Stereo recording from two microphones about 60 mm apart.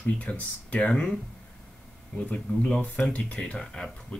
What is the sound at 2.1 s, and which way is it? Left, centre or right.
Speech, centre.